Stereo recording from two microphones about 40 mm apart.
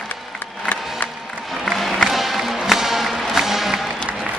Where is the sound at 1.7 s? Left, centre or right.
Centre.